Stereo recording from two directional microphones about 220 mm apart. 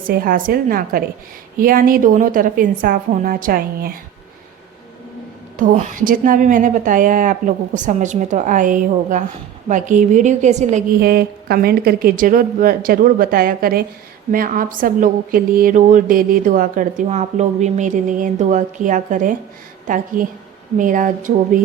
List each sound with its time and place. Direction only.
0.0 s a woman's voice: 40° right (ahead or behind)
5.5 s a woman's voice: 35° right (ahead or behind)